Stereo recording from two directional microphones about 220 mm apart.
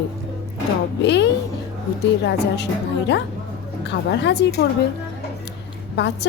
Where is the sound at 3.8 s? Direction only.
50° left (ahead or behind).